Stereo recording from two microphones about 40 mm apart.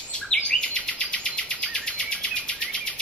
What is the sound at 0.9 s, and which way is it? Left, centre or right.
Bird, left.